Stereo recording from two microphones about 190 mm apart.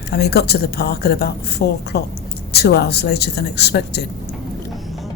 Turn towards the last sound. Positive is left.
turn(degrees=60)  # may be behind; listen again after turning